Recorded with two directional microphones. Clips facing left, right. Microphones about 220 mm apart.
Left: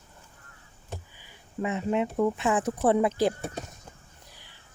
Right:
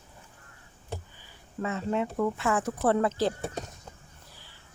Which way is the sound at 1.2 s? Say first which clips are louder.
Left 4 dB; 15° left (ahead or behind).